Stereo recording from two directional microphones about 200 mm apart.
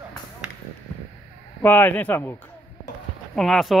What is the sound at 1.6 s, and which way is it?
Speech, 10° left (ahead or behind).